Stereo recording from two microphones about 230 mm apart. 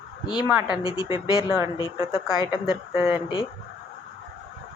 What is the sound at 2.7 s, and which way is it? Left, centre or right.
Speech, centre.